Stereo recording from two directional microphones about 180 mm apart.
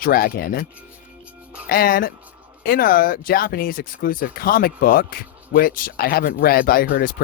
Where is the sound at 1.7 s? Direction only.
55° left (ahead or behind).